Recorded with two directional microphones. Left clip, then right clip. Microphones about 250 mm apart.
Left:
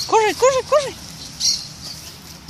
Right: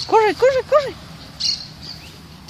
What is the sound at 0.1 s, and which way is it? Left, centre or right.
Speech, centre.